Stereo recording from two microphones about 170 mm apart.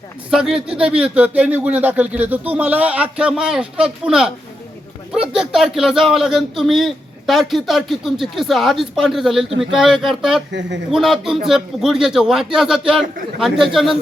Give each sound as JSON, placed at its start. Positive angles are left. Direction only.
{"t": 0.3, "sound": "speech", "side_deg": -5}